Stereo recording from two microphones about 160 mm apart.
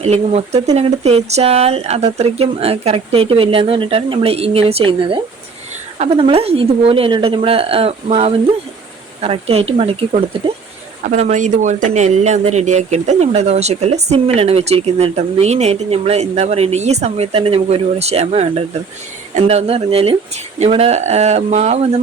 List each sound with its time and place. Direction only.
0.0 s speech: 40° right (ahead or behind)